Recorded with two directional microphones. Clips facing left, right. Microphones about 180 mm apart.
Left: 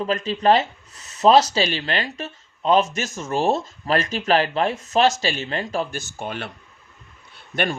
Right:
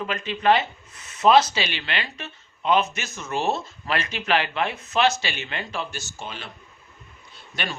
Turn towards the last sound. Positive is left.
turn(degrees=55)  # may be behind; listen again after turning